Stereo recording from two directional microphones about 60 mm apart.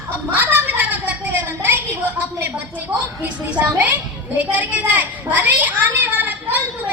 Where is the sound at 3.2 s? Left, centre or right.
Right.